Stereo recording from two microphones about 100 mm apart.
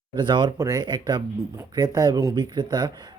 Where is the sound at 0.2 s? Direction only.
50° right (ahead or behind).